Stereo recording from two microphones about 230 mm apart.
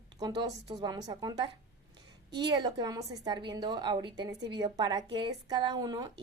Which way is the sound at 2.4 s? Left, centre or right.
Centre.